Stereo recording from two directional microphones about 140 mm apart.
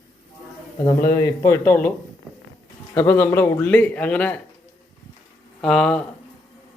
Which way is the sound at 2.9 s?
20° left (ahead or behind).